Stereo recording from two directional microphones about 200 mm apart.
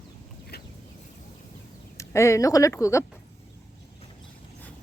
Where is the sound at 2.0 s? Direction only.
15° left (ahead or behind).